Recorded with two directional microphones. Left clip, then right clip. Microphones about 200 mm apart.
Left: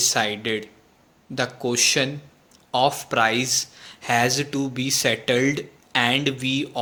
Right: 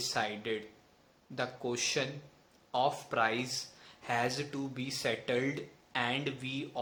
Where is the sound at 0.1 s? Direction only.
50° left (ahead or behind).